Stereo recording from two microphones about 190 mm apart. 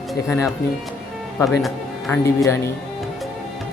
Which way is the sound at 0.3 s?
15° left (ahead or behind).